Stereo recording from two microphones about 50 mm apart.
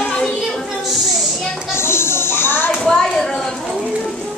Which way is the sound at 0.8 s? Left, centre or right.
Centre.